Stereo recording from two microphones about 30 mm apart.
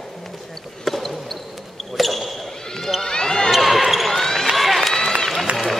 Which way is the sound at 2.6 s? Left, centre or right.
Centre.